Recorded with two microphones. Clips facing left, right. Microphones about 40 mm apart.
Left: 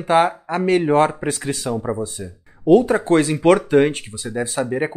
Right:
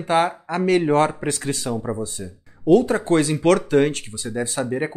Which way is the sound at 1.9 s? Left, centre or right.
Left.